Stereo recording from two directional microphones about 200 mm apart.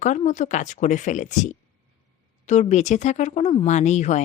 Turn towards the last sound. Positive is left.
turn(degrees=35)  # may be behind; listen again after turning